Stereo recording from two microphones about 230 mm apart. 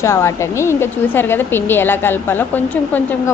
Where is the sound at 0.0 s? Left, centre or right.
Centre.